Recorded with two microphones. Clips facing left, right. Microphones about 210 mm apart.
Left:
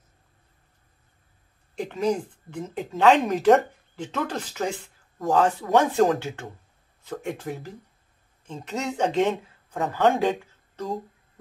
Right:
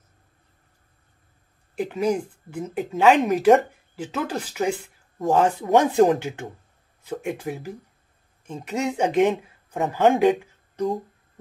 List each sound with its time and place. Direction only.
1.8 s speech: 10° right (ahead or behind)